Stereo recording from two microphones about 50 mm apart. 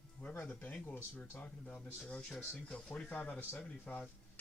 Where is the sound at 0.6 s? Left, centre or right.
Left.